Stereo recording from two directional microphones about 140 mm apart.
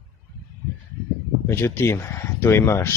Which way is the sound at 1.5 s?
15° left (ahead or behind).